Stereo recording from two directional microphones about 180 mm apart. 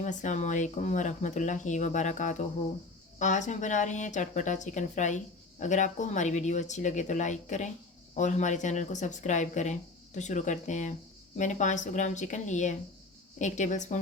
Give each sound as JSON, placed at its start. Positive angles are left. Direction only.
{"t": 0.0, "sound": "speech", "side_deg": 45}